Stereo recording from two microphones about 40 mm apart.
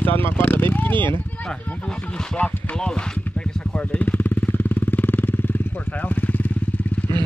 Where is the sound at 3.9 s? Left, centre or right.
Left.